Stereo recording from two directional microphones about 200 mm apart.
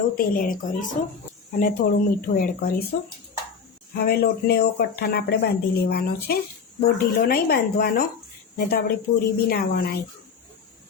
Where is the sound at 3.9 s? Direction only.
50° left (ahead or behind).